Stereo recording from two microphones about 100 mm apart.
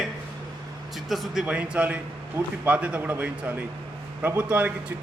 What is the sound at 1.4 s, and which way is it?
A man's voice, 15° right (ahead or behind).